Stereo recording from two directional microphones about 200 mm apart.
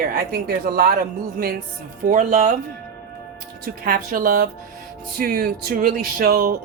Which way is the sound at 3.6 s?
45° right (ahead or behind).